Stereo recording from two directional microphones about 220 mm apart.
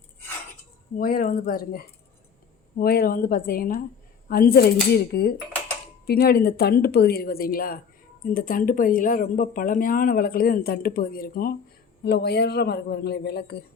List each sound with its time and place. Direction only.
0.9 s speech: 40° left (ahead or behind)